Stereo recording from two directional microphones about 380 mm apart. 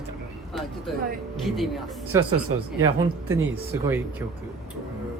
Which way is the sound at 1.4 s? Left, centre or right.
Centre.